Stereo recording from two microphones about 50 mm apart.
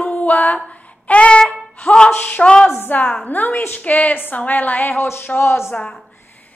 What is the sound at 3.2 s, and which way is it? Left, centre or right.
A woman's voice, left.